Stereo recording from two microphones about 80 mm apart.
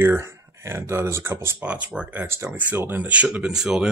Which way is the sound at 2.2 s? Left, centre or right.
Right.